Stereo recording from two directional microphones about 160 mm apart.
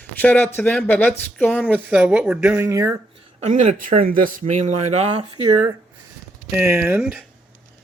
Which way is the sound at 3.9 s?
60° right (ahead or behind).